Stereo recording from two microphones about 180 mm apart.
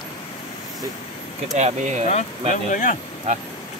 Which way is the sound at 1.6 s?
40° right (ahead or behind).